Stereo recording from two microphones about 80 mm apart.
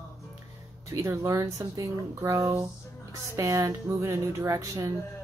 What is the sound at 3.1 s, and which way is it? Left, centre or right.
Speech, right.